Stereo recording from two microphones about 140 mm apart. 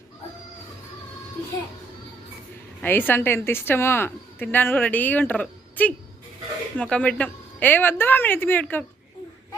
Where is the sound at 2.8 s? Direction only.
15° left (ahead or behind).